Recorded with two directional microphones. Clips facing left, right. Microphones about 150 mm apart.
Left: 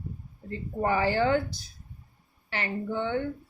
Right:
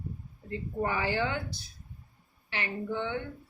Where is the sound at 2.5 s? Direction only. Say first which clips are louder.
Left 3 dB; 45° left (ahead or behind).